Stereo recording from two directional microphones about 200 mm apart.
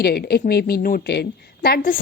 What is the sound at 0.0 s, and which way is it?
A woman's voice, 55° left (ahead or behind).